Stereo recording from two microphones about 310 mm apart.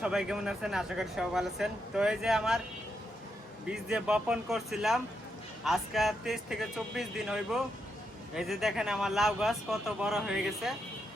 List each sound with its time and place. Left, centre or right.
0.0 s speech: centre
3.7 s speech: centre